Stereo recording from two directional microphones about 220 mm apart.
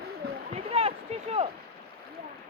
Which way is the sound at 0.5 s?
25° right (ahead or behind).